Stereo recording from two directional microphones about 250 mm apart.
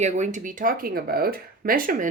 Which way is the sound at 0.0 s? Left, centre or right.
Right.